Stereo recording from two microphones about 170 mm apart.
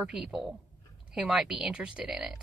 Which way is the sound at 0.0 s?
5° right (ahead or behind).